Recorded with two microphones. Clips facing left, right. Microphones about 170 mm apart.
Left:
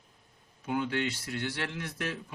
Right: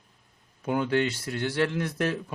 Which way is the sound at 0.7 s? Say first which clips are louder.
Right 6 dB; 45° right (ahead or behind).